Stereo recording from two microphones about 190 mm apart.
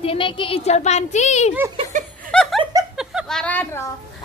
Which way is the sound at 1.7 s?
40° right (ahead or behind).